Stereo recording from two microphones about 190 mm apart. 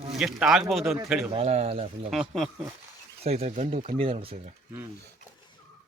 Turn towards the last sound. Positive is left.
turn(degrees=-30)  # may be behind; listen again after turning